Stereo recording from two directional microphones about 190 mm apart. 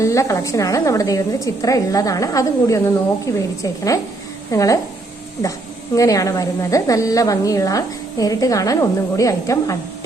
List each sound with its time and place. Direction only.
0.0 s a woman's voice: 15° left (ahead or behind)